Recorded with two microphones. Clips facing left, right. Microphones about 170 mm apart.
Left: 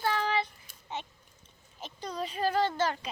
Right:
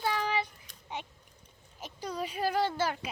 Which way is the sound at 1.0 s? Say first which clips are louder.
Left 1 dB; 10° right (ahead or behind).